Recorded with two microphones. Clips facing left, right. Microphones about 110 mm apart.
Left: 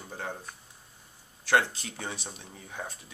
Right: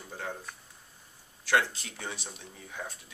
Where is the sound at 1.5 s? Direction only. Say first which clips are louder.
Left 2 dB; 30° left (ahead or behind).